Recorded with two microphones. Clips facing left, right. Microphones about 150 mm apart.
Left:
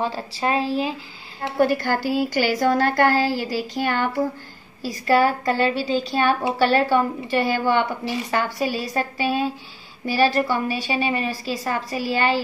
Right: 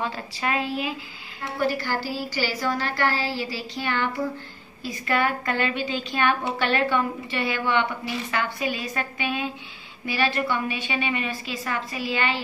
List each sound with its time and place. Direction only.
0.0 s a woman's voice: 30° left (ahead or behind)
1.6 s a woman's voice: 50° left (ahead or behind)